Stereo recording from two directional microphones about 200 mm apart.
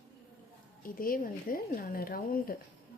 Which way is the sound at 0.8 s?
45° left (ahead or behind).